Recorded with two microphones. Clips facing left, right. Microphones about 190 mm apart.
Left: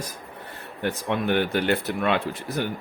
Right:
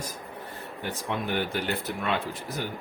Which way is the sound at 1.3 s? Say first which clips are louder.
Left 8 dB; 65° left (ahead or behind).